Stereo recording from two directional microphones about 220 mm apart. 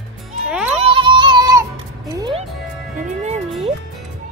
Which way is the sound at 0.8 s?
20° right (ahead or behind).